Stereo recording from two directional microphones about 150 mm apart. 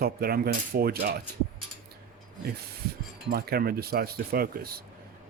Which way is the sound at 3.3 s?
90° right.